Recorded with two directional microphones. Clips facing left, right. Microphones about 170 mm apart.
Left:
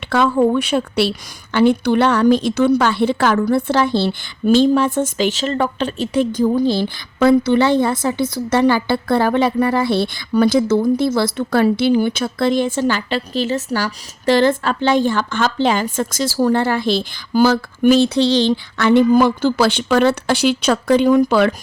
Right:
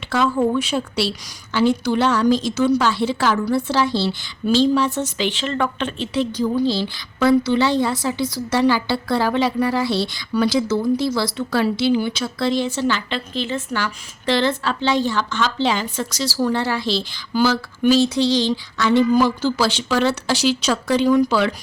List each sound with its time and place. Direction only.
0.1 s a woman's voice: 60° left (ahead or behind)